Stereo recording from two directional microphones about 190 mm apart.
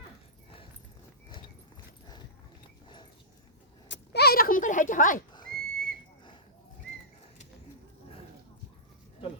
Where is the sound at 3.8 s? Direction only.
65° left (ahead or behind); by 5.2 s 45° left (ahead or behind).